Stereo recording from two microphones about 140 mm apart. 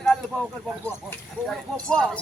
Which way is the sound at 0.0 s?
Centre (ahead or behind).